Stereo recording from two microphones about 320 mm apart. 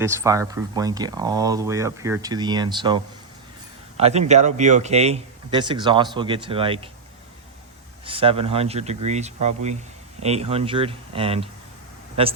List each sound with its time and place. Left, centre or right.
0.0 s speech: centre
8.0 s speech: centre